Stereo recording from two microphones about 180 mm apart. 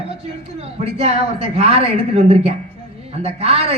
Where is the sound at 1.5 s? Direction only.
35° right (ahead or behind).